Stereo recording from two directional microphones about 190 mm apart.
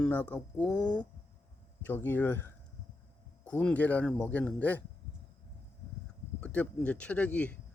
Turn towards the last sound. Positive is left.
turn(degrees=5)  # may be behind; listen again after turning